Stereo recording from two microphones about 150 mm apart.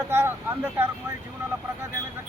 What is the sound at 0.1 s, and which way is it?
Speech, 15° right (ahead or behind).